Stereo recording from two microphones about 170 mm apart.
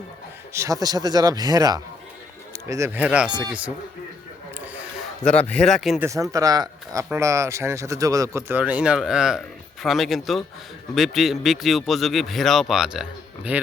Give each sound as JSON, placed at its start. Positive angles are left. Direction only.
{"t": 0.5, "sound": "speech", "side_deg": -20}
{"t": 5.2, "sound": "speech", "side_deg": 5}
{"t": 6.0, "sound": "speech", "side_deg": -20}